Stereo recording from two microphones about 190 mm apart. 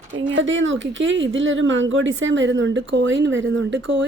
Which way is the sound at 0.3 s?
80° right.